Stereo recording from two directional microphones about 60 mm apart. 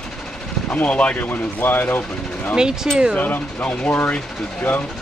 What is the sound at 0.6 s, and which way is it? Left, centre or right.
Speech, left.